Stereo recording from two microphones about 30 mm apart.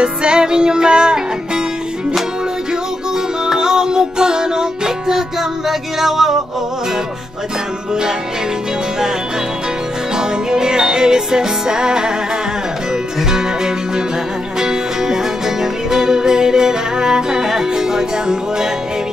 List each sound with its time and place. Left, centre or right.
0.0 s music: right
3.5 s music: right; by 6.3 s centre
10.1 s music: right
13.3 s music: right